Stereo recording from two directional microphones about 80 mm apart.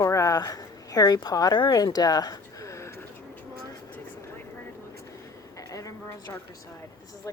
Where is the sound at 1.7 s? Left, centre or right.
Left.